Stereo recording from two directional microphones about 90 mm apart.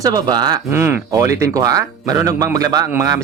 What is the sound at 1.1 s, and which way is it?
Speech, 40° right (ahead or behind).